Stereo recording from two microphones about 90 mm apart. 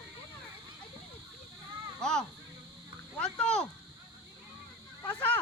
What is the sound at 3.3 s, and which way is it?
Speech, 10° left (ahead or behind).